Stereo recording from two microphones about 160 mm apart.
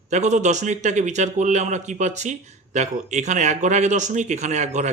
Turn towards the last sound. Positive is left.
turn(degrees=-45)  # may be behind; listen again after turning